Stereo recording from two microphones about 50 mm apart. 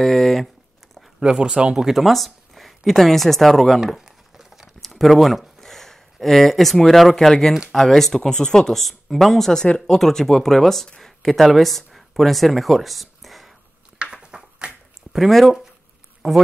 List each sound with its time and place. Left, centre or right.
0.0 s speech: centre
1.2 s speech: centre
2.0 s speech: centre
3.8 s a sound: centre
4.7 s speech: centre
14.1 s a sound: centre
15.1 s speech: centre